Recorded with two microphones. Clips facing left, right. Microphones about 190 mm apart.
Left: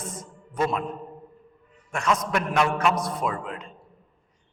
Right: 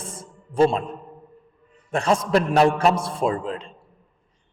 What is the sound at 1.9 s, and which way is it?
A man's voice, 30° right (ahead or behind).